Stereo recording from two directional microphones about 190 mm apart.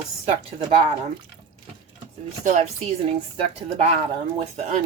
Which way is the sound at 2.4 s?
35° right (ahead or behind).